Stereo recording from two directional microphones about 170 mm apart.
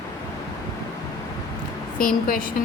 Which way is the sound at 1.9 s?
55° left (ahead or behind).